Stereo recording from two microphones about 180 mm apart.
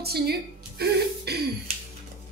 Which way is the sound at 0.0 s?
60° right (ahead or behind).